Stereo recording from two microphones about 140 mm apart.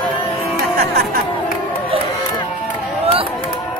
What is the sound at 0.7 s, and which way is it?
Music, 90° right.